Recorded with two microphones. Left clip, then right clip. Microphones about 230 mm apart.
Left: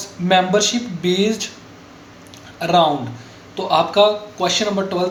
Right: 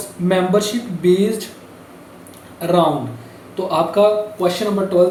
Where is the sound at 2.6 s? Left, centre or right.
Centre.